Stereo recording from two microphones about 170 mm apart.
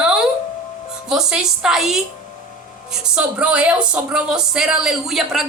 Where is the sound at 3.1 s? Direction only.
5° right (ahead or behind).